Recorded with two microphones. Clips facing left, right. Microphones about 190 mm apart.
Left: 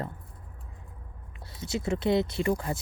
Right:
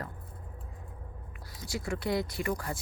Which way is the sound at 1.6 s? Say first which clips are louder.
Left 5 dB; 25° left (ahead or behind).